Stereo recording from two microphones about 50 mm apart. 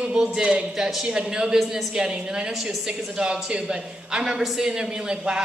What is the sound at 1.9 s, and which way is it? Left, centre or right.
A man's voice, centre.